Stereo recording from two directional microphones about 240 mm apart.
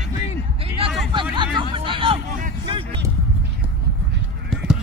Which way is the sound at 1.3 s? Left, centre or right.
Centre.